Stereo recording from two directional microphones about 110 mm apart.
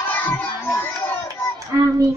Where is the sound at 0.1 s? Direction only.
20° left (ahead or behind).